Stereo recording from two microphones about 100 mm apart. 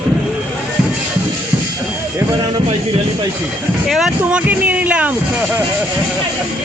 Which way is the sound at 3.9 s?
5° right (ahead or behind).